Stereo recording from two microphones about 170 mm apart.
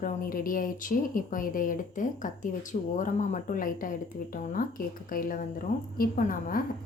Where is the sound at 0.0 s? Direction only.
55° left (ahead or behind).